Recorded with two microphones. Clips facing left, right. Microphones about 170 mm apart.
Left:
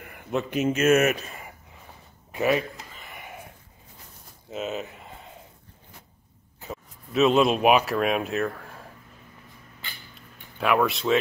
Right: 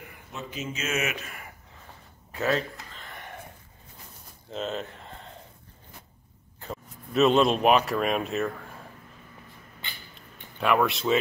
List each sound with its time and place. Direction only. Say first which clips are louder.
0.3 s speech: left 11 dB; 60° left (ahead or behind)
1.1 s speech: left 4 dB; 25° left (ahead or behind)
2.3 s a sound: left 3 dB; 15° left (ahead or behind)
4.5 s a sound: left 1 dB; 5° left (ahead or behind)
6.6 s speech: even; 5° left (ahead or behind)
10.6 s speech: left 1 dB; centre (ahead or behind)